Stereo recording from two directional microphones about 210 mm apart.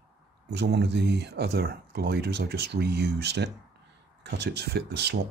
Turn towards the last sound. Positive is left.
turn(degrees=-50)  # may be behind; listen again after turning